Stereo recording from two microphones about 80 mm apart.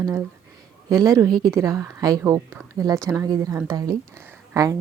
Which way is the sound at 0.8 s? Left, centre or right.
Right.